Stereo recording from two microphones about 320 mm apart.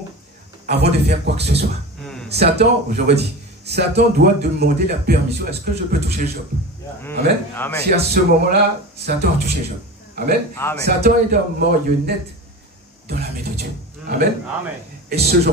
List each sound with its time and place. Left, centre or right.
0.7 s a man's voice: right
7.0 s a man's voice: centre
7.9 s a man's voice: right
10.5 s a man's voice: centre
10.8 s a man's voice: right